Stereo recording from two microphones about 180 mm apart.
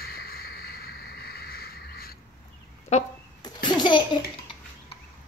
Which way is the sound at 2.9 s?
40° left (ahead or behind).